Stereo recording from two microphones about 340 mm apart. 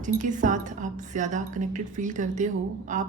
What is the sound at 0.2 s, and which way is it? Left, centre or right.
A woman's voice, right.